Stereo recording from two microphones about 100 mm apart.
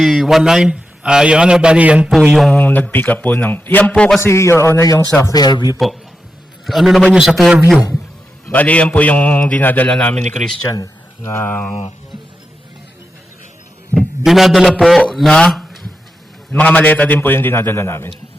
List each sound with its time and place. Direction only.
0.0 s a man's voice: centre (ahead or behind)
2.5 s a man's voice: 15° left (ahead or behind)
4.2 s a man's voice: 25° left (ahead or behind)
5.3 s a man's voice: 45° left (ahead or behind)
6.7 s a man's voice: centre (ahead or behind)
8.4 s a man's voice: 15° left (ahead or behind)
10.7 s a sound: 40° left (ahead or behind)
11.3 s a man's voice: 20° left (ahead or behind)
13.9 s a sound: 15° left (ahead or behind)
14.3 s a man's voice: centre (ahead or behind)
16.5 s a man's voice: 15° left (ahead or behind)